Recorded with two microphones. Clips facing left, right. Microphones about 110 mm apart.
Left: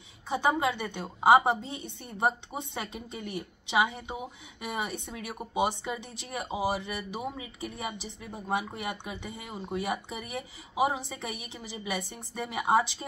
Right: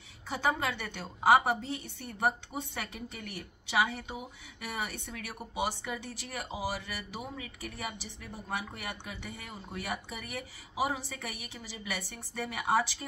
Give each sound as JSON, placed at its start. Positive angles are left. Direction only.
{"t": 0.3, "sound": "a woman's voice", "side_deg": 20}